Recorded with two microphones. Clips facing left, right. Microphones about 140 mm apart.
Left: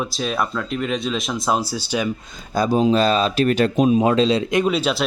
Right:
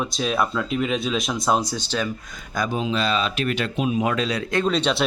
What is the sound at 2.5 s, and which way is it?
Speech, 35° left (ahead or behind).